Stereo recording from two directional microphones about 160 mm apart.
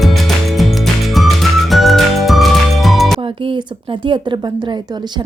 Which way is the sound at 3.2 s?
35° right (ahead or behind).